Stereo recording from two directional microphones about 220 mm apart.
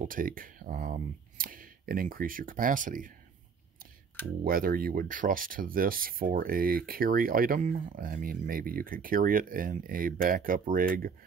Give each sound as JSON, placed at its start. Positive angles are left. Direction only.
{"t": 0.0, "sound": "speech", "side_deg": -40}
{"t": 4.5, "sound": "speech", "side_deg": -40}